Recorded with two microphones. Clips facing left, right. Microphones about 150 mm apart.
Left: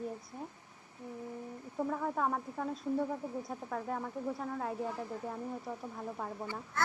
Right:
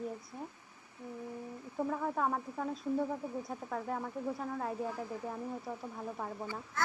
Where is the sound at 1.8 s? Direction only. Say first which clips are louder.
Even; centre (ahead or behind).